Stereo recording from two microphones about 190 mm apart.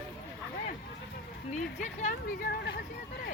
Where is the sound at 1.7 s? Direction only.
45° left (ahead or behind); by 2.8 s 60° left (ahead or behind).